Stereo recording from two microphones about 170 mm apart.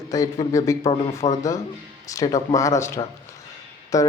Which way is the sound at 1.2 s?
35° left (ahead or behind).